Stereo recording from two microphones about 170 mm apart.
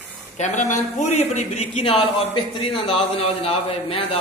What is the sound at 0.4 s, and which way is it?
Speech, 45° left (ahead or behind).